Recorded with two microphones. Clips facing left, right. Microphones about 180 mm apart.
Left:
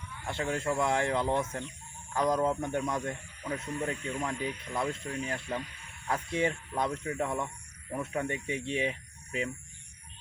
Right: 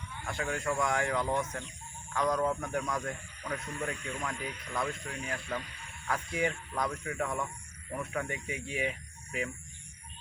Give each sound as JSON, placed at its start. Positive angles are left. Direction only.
{"t": 0.3, "sound": "speech", "side_deg": 25}